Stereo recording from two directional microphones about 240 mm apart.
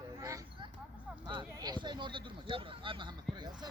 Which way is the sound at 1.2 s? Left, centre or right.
Centre.